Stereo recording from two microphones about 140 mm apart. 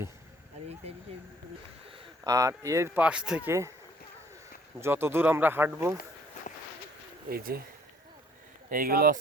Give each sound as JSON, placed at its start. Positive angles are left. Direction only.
{"t": 2.2, "sound": "speech", "side_deg": -20}
{"t": 3.0, "sound": "speech", "side_deg": -5}
{"t": 4.8, "sound": "speech", "side_deg": -15}
{"t": 7.3, "sound": "speech", "side_deg": -90}
{"t": 8.7, "sound": "speech", "side_deg": -90}